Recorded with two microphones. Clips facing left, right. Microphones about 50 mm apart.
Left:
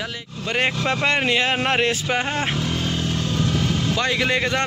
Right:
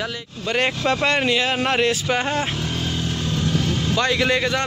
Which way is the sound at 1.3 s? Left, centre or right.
Left.